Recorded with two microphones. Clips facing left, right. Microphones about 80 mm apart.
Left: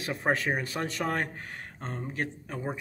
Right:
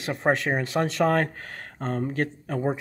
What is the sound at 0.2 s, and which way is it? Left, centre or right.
Speech, right.